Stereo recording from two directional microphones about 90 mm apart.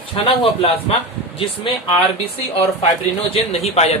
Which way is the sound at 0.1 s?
90° left.